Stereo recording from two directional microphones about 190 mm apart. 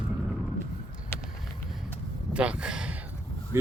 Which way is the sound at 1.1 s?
15° left (ahead or behind).